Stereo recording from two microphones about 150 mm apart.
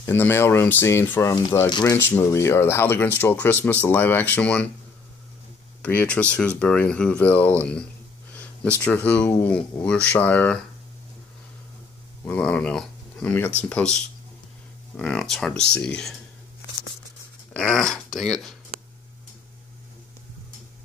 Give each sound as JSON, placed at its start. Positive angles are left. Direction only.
{"t": 0.0, "sound": "speech", "side_deg": 15}
{"t": 1.7, "sound": "speech", "side_deg": 25}
{"t": 2.0, "sound": "speech", "side_deg": 15}
{"t": 5.8, "sound": "speech", "side_deg": 10}
{"t": 7.6, "sound": "a sound", "side_deg": 5}
{"t": 8.7, "sound": "speech", "side_deg": 10}
{"t": 12.3, "sound": "speech", "side_deg": 10}
{"t": 15.0, "sound": "speech", "side_deg": 5}
{"t": 17.6, "sound": "speech", "side_deg": 5}